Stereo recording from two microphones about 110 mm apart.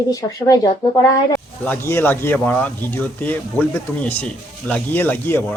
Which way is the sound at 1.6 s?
20° left (ahead or behind).